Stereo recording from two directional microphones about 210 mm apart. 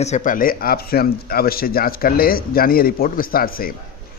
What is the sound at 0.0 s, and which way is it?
Speech, 35° left (ahead or behind).